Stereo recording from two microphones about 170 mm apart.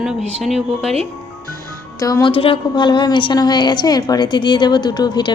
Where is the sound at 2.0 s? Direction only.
20° left (ahead or behind).